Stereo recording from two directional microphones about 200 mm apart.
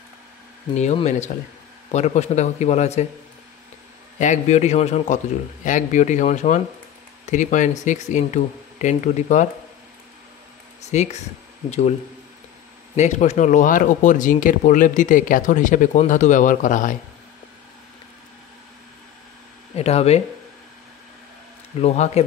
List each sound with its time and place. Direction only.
0.7 s speech: 35° left (ahead or behind)
4.2 s speech: 35° left (ahead or behind)
10.8 s speech: 35° left (ahead or behind)
12.9 s speech: 35° left (ahead or behind)
19.7 s speech: 30° left (ahead or behind)
21.7 s speech: 30° left (ahead or behind)